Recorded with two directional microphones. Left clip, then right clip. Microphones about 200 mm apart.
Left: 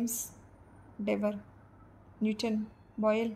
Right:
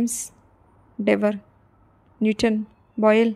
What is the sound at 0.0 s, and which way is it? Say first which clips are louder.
A woman's voice: right 9 dB; 40° right (ahead or behind).